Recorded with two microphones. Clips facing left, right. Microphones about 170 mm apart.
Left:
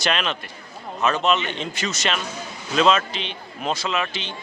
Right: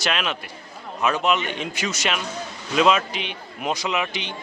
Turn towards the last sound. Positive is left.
turn(degrees=-15)  # may be behind; listen again after turning